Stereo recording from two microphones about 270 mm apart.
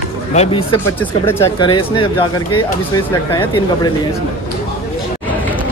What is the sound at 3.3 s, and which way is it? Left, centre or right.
Speech, centre.